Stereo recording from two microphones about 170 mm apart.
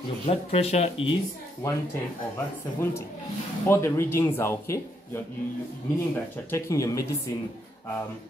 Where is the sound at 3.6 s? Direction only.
15° left (ahead or behind).